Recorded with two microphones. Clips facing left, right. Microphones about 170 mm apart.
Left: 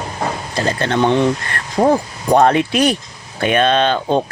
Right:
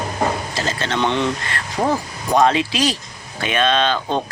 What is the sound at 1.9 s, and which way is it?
Speech, 55° left (ahead or behind).